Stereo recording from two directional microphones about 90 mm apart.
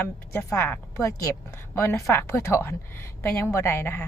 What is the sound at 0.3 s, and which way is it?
A woman's voice, 25° left (ahead or behind).